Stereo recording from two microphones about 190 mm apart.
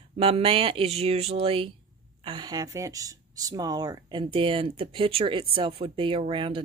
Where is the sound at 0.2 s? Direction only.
30° right (ahead or behind).